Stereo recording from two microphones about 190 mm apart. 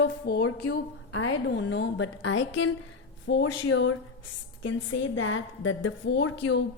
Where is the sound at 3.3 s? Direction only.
75° left (ahead or behind).